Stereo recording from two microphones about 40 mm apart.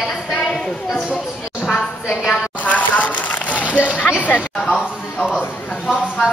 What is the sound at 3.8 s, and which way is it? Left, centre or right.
Speech, left.